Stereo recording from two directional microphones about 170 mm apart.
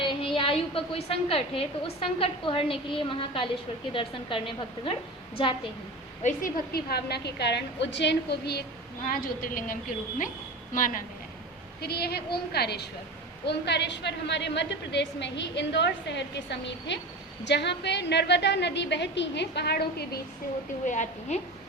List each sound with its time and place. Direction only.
0.0 s a woman's voice: 30° left (ahead or behind)
6.2 s a woman's voice: 55° left (ahead or behind); by 8.6 s 75° left (ahead or behind)
9.0 s a woman's voice: 55° left (ahead or behind)
11.8 s a woman's voice: 70° left (ahead or behind)
20.8 s a woman's voice: 45° left (ahead or behind)